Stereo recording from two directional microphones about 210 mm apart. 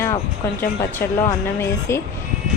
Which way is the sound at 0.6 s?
10° left (ahead or behind).